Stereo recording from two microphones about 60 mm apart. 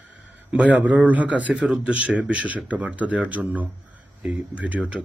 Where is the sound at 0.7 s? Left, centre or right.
Right.